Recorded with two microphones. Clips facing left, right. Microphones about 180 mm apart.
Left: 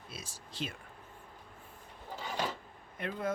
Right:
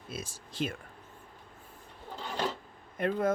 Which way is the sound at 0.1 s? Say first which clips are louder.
Right 8 dB; 50° right (ahead or behind).